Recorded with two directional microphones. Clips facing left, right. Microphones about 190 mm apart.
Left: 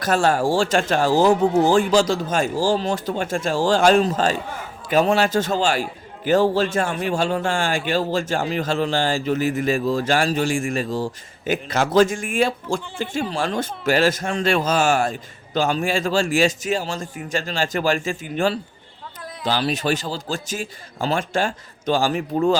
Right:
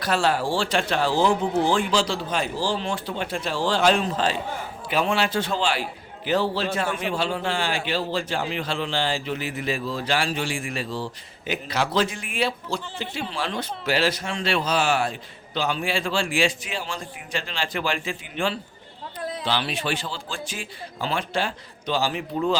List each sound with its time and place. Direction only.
0.0 s a man's voice: 45° left (ahead or behind)